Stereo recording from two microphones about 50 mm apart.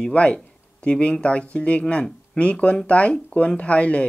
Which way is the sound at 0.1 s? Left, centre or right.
Left.